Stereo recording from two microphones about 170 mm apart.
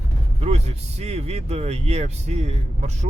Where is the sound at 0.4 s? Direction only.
40° right (ahead or behind).